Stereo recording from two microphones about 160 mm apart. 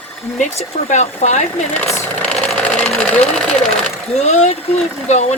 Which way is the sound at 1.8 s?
20° left (ahead or behind).